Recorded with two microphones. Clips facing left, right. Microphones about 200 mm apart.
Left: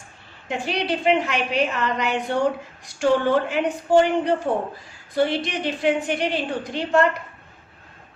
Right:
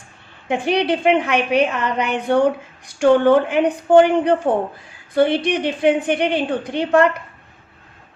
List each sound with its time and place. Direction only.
0.4 s a woman's voice: 55° right (ahead or behind)